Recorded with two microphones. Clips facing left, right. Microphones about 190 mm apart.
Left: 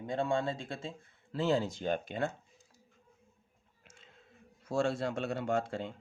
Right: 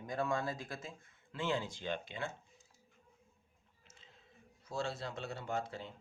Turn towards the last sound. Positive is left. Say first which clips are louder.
# left 7 dB
turn(degrees=70)  # may be behind; listen again after turning